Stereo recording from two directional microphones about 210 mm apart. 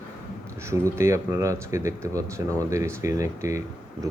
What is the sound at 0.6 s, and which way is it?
Speech, 15° right (ahead or behind).